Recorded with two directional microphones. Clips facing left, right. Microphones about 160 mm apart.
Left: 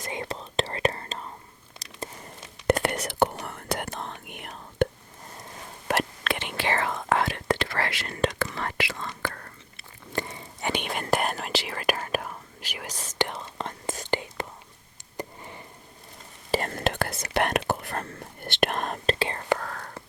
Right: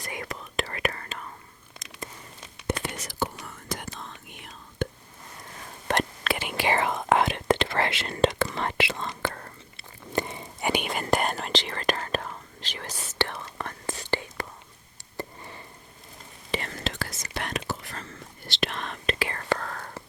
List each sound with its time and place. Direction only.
0.0 s whispering: 25° left (ahead or behind)
1.8 s a sound: 35° left (ahead or behind)
2.6 s whispering: 65° left (ahead or behind)
5.9 s whispering: centre (ahead or behind); by 14.4 s 20° left (ahead or behind)
15.2 s sniff: 15° left (ahead or behind)
16.5 s whispering: 45° left (ahead or behind)
19.5 s whispering: centre (ahead or behind)